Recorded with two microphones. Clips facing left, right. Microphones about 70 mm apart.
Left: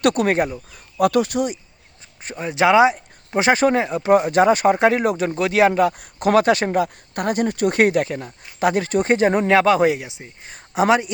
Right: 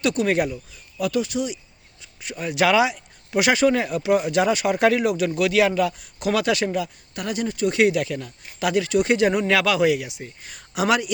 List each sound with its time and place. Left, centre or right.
0.0 s speech: left
0.3 s speech: left
0.7 s speech: left
2.2 s speech: left
4.1 s speech: left